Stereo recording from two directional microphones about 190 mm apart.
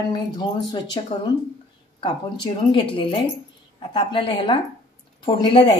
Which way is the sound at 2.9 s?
25° left (ahead or behind).